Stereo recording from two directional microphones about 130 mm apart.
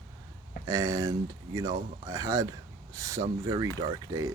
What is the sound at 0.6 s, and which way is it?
Speech, 25° right (ahead or behind).